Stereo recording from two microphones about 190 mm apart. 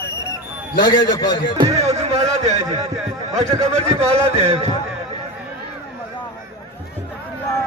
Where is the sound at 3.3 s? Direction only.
35° right (ahead or behind).